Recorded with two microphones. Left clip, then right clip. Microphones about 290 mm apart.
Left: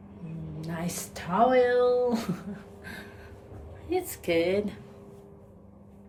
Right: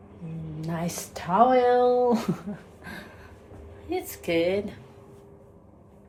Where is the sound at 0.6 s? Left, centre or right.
Centre.